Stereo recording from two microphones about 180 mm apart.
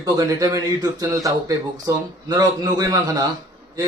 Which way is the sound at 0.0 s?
20° right (ahead or behind).